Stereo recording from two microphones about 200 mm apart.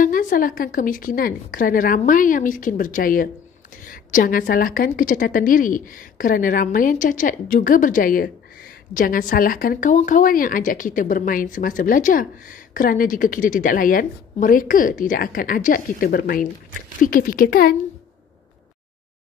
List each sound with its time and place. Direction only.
0.0 s speech: 40° left (ahead or behind)